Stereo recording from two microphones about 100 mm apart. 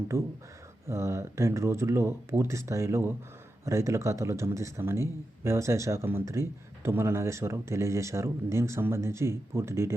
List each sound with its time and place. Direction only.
0.1 s speech: 25° right (ahead or behind)